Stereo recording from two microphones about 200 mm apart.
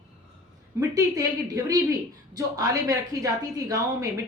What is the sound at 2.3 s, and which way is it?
A woman's voice, 20° right (ahead or behind).